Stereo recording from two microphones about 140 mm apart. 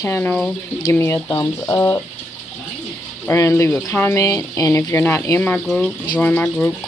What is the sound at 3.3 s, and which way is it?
Speech, 20° left (ahead or behind).